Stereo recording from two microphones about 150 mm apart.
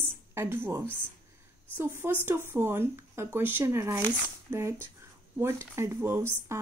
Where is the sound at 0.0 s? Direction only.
15° right (ahead or behind).